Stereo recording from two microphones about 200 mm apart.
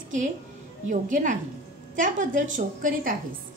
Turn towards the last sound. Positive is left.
turn(degrees=-40)  # may be behind; listen again after turning